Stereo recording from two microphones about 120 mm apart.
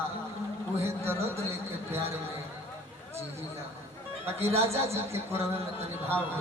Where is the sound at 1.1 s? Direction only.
55° right (ahead or behind).